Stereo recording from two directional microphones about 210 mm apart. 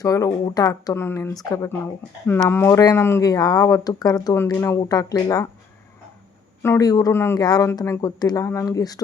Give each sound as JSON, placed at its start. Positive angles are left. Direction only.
{"t": 0.0, "sound": "speech", "side_deg": 15}
{"t": 6.6, "sound": "speech", "side_deg": 15}